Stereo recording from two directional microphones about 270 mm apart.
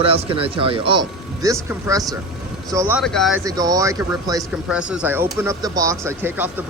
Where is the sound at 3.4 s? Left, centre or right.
Centre.